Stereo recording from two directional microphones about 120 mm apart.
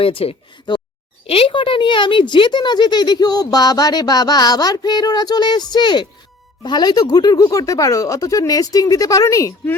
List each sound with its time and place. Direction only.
0.0 s speech: 50° left (ahead or behind)
1.3 s a sound: 50° left (ahead or behind)
6.6 s speech: 35° left (ahead or behind)